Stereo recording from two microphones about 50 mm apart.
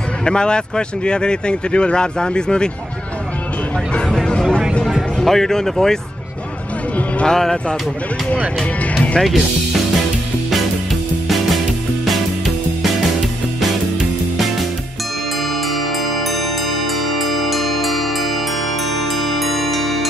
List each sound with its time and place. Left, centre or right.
0.2 s speech: centre
4.1 s music: centre
5.2 s speech: centre
7.2 s speech: centre
8.9 s music: left
9.2 s speech: centre
11.2 s music: centre
17.1 s music: centre
19.1 s music: centre